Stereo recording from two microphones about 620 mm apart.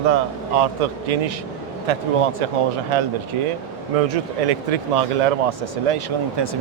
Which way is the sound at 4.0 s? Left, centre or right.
Right.